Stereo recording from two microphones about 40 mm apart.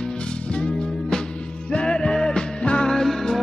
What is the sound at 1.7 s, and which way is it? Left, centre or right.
Music, left.